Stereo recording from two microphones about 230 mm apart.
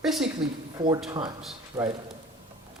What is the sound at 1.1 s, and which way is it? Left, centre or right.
Speech, centre.